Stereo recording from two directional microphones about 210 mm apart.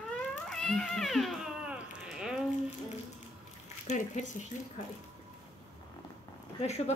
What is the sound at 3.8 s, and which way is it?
Speech, 35° left (ahead or behind).